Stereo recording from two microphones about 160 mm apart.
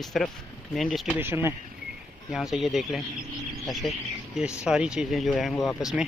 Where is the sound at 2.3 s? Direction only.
Centre (ahead or behind).